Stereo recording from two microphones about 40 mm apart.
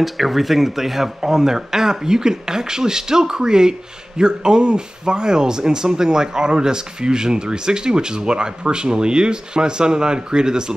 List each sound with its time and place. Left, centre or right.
0.0 s speech: centre